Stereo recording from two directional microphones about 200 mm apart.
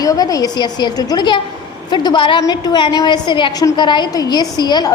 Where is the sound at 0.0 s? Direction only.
20° left (ahead or behind).